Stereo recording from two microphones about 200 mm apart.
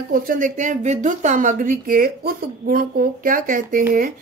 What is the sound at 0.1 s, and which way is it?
A woman's voice, 40° right (ahead or behind).